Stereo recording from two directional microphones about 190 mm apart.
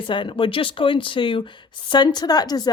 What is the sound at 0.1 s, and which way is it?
Speech, 25° left (ahead or behind).